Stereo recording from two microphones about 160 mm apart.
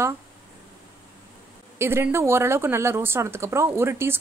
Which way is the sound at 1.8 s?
15° right (ahead or behind).